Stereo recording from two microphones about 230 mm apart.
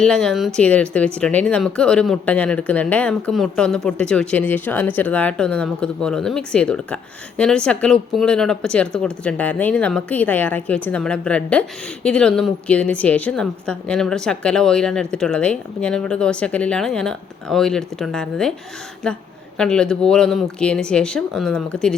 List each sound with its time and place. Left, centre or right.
0.0 s speech: centre